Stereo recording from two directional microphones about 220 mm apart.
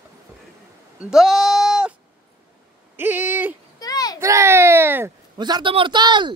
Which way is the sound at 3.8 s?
15° left (ahead or behind).